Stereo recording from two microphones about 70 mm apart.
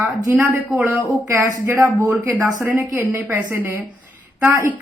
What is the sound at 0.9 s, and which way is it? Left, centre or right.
Speech, right.